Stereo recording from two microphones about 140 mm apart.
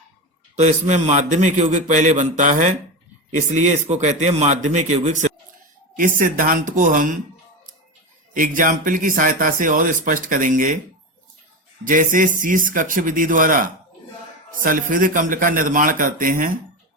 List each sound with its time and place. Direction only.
0.5 s a man's voice: 55° right (ahead or behind)
6.1 s speech: 80° right
8.3 s speech: 75° right (ahead or behind)
11.9 s speech: 70° right (ahead or behind)